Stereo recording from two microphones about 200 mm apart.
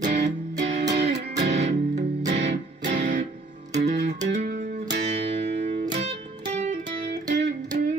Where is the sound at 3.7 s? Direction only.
40° right (ahead or behind).